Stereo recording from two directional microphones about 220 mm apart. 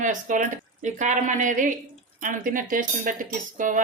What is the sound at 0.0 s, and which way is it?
A woman's voice, 35° right (ahead or behind).